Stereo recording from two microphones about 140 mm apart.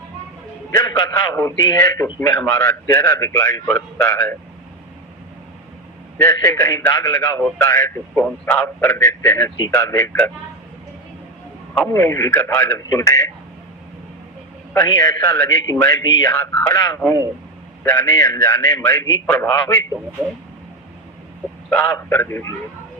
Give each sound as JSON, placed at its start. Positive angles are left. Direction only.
{"t": 0.8, "sound": "a man's voice", "side_deg": 25}
{"t": 6.1, "sound": "a man's voice", "side_deg": 20}
{"t": 11.9, "sound": "a man's voice", "side_deg": 20}
{"t": 14.8, "sound": "a man's voice", "side_deg": 25}
{"t": 21.7, "sound": "a man's voice", "side_deg": 10}